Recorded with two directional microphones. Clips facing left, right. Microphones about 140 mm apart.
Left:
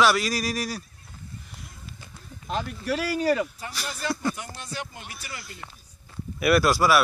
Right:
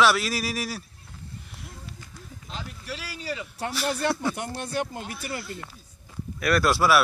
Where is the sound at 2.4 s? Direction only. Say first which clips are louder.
Left 10 dB; 55° left (ahead or behind).